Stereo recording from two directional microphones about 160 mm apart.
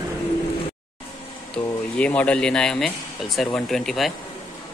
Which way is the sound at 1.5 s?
5° left (ahead or behind).